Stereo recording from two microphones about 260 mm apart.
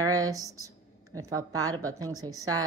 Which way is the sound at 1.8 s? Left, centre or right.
Centre.